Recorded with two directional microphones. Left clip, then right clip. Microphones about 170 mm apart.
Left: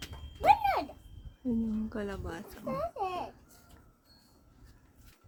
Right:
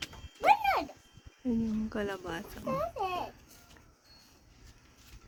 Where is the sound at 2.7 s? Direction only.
20° left (ahead or behind).